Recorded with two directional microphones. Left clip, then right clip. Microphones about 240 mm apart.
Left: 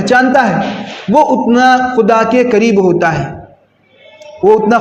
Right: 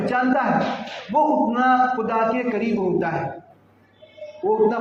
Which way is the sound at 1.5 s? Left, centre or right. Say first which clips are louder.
Left 9 dB; left.